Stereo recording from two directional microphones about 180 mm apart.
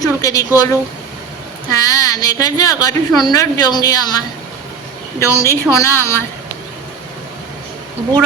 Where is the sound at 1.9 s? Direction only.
20° left (ahead or behind).